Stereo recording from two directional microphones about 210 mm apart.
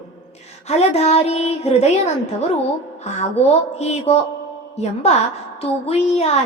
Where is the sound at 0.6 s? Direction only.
30° left (ahead or behind).